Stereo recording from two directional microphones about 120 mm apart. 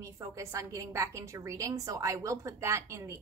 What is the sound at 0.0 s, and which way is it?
A woman's voice, 25° right (ahead or behind).